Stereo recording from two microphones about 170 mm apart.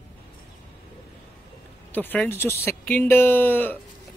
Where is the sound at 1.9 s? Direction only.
10° left (ahead or behind).